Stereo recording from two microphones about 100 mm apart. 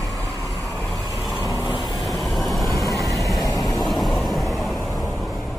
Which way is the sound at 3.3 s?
35° left (ahead or behind).